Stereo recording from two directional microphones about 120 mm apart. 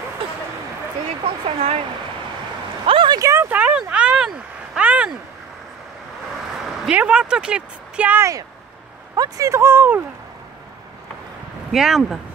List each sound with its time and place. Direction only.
1.2 s speech: 55° right (ahead or behind)
2.9 s a sound: 45° right (ahead or behind)
3.2 s a sound: 25° right (ahead or behind)
6.9 s speech: 10° right (ahead or behind)
9.1 s speech: 30° right (ahead or behind)
11.7 s speech: 5° right (ahead or behind)